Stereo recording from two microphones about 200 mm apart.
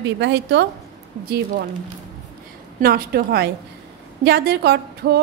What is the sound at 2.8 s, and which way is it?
A woman's voice, 50° right (ahead or behind).